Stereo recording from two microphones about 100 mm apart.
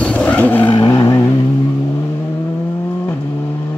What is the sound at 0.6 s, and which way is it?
Vehicle, 50° left (ahead or behind).